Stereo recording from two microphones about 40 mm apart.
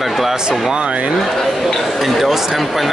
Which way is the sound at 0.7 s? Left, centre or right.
Right.